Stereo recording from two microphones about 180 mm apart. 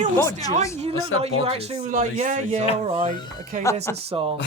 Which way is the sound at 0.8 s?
35° right (ahead or behind).